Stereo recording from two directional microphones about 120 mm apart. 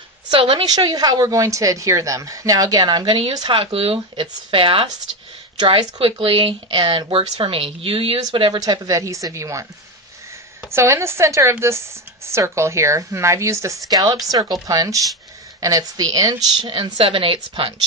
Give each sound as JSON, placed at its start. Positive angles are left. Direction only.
{"t": 0.3, "sound": "a woman's voice", "side_deg": -50}
{"t": 0.7, "sound": "a woman's voice", "side_deg": -35}
{"t": 3.3, "sound": "a woman's voice", "side_deg": -45}
{"t": 8.5, "sound": "a woman's voice", "side_deg": -30}
{"t": 10.7, "sound": "a woman's voice", "side_deg": -25}
{"t": 14.7, "sound": "a woman's voice", "side_deg": -30}